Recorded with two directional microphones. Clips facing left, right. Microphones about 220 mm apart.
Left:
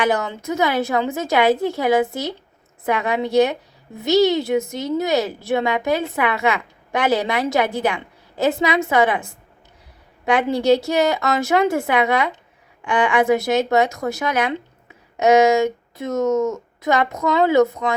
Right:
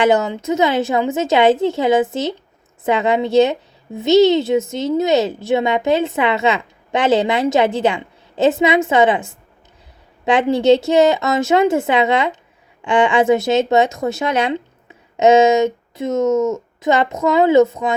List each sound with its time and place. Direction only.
0.0 s a woman's voice: 25° right (ahead or behind)